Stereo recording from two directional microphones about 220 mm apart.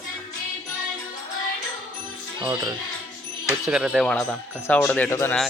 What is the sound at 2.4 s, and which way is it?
Speech, 15° right (ahead or behind).